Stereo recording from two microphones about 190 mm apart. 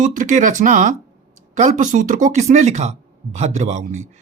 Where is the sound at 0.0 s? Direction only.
40° right (ahead or behind).